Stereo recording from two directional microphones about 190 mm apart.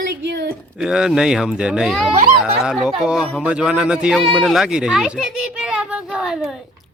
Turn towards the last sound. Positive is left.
turn(degrees=-5)  # may be behind; listen again after turning